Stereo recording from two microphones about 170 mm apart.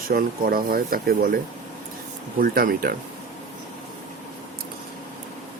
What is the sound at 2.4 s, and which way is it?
Speech, 60° right (ahead or behind).